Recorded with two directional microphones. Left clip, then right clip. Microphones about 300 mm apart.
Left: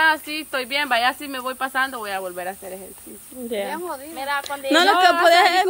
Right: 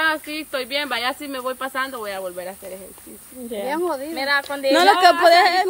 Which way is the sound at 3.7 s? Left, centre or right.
Right.